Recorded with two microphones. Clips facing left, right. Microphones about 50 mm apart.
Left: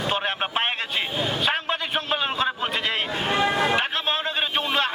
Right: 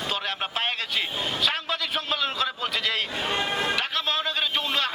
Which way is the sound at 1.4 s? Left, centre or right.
Left.